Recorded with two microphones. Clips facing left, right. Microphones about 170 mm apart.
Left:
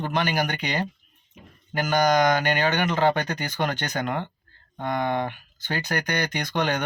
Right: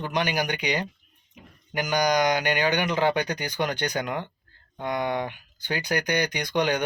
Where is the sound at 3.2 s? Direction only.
10° right (ahead or behind).